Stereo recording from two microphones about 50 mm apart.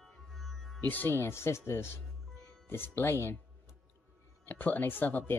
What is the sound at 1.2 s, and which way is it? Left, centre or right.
Speech, left.